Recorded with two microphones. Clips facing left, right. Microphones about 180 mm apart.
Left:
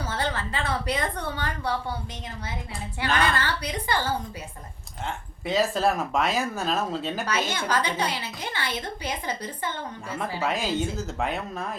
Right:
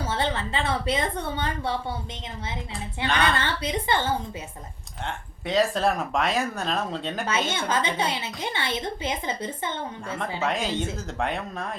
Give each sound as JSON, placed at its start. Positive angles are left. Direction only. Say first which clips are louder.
{"t": 0.0, "sound": "a woman's voice", "louder": "right 2 dB", "side_deg": -25}
{"t": 3.2, "sound": "a woman's voice", "louder": "right 1 dB", "side_deg": -25}
{"t": 5.0, "sound": "speech", "louder": "left 1 dB", "side_deg": 0}
{"t": 7.3, "sound": "a woman's voice", "louder": "right 2 dB", "side_deg": -25}
{"t": 10.4, "sound": "speech", "louder": "even", "side_deg": 5}